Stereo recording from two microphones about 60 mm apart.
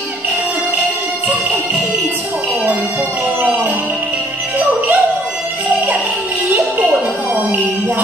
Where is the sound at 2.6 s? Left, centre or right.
Right.